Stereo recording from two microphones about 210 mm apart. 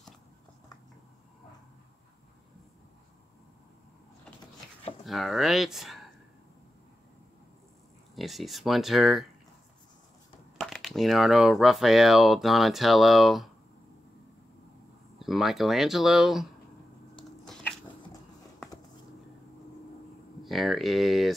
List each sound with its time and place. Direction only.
5.0 s speech: centre (ahead or behind)
8.2 s speech: centre (ahead or behind)
10.6 s speech: centre (ahead or behind)
15.1 s speech: centre (ahead or behind)
20.4 s speech: centre (ahead or behind)